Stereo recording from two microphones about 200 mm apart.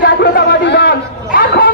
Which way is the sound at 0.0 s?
50° left (ahead or behind).